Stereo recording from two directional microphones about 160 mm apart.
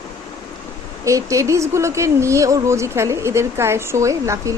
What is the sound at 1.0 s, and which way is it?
Speech, 20° right (ahead or behind).